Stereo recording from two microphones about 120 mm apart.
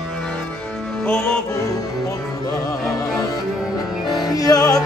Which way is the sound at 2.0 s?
30° left (ahead or behind).